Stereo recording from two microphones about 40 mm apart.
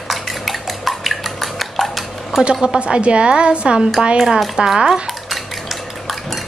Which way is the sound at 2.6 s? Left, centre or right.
Right.